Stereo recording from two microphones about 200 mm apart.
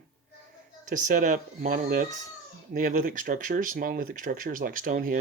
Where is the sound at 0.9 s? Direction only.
40° right (ahead or behind).